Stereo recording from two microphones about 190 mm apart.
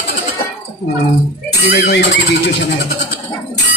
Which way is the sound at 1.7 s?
65° left (ahead or behind).